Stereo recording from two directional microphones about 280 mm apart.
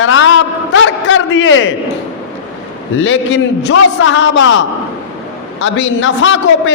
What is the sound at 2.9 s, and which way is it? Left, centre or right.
A man's voice, left.